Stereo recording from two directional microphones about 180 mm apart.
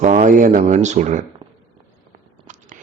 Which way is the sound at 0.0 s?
45° right (ahead or behind).